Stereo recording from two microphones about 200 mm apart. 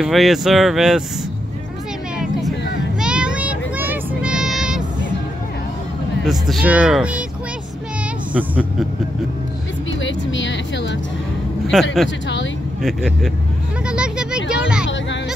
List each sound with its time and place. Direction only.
0.0 s speech: centre (ahead or behind)
3.0 s child singing: 5° right (ahead or behind)
6.2 s speech: centre (ahead or behind)
8.3 s speech: 5° right (ahead or behind)
10.0 s speech: 65° left (ahead or behind)
11.7 s speech: centre (ahead or behind)
13.8 s a sound: 5° right (ahead or behind)